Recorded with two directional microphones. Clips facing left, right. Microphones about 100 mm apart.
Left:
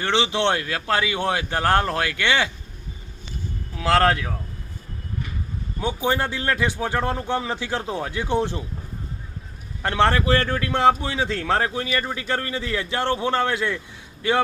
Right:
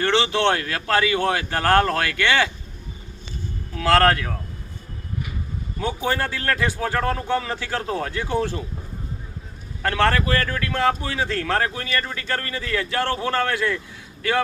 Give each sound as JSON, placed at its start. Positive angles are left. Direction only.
{"t": 0.0, "sound": "speech", "side_deg": 20}
{"t": 3.8, "sound": "speech", "side_deg": 20}
{"t": 5.8, "sound": "speech", "side_deg": 20}
{"t": 9.8, "sound": "speech", "side_deg": 20}